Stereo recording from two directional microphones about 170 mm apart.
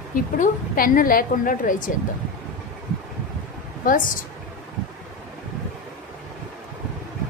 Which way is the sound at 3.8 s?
55° left (ahead or behind).